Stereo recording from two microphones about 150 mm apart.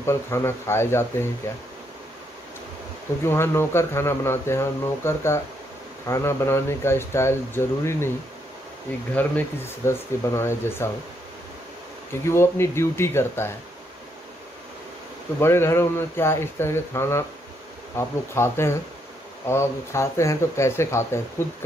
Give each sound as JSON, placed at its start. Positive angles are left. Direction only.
{"t": 0.0, "sound": "speech", "side_deg": 20}
{"t": 3.3, "sound": "speech", "side_deg": 15}
{"t": 9.1, "sound": "speech", "side_deg": 15}
{"t": 12.1, "sound": "speech", "side_deg": 15}
{"t": 15.4, "sound": "speech", "side_deg": 15}